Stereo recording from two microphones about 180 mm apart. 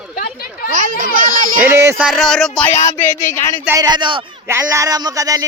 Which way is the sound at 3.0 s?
45° left (ahead or behind).